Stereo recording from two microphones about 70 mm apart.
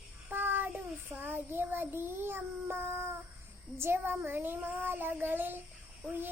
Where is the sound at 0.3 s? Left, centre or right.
Right.